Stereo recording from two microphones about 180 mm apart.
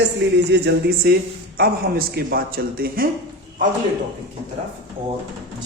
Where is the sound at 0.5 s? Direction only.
70° right (ahead or behind).